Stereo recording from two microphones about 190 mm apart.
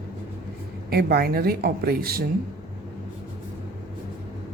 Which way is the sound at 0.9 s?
55° right (ahead or behind).